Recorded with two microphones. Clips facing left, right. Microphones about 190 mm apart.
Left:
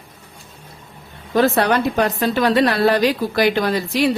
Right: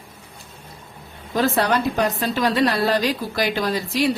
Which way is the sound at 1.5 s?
60° left (ahead or behind).